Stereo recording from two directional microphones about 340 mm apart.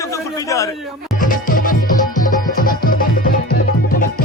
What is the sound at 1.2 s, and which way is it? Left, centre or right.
Music, left.